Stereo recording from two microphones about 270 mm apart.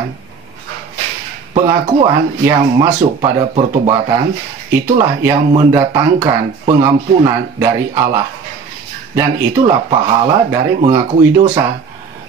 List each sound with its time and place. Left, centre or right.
1.5 s speech: centre